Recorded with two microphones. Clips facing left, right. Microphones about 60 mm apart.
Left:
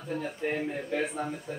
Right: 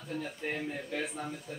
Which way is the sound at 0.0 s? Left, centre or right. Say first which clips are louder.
Left 5 dB; centre.